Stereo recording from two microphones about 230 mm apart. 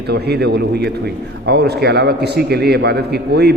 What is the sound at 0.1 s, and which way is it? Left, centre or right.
A man's voice, right.